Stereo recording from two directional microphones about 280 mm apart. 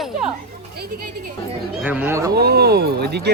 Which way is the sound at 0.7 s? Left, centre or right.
Right.